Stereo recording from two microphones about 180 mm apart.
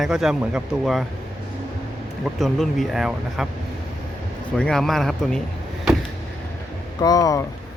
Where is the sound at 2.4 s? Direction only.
Centre (ahead or behind).